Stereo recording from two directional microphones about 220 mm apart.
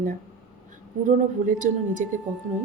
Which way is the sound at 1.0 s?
35° right (ahead or behind).